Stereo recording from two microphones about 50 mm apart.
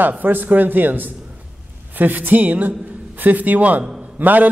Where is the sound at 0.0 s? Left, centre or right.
Right.